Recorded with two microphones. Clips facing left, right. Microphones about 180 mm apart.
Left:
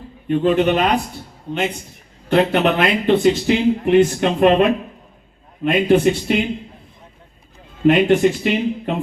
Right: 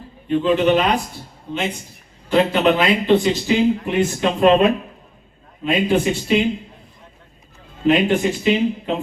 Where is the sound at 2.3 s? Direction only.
55° left (ahead or behind).